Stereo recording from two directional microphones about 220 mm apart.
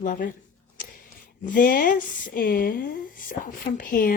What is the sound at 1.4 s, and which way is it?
Speech, 40° left (ahead or behind).